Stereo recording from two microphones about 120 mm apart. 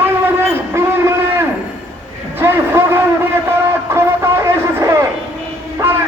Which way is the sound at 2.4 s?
20° right (ahead or behind).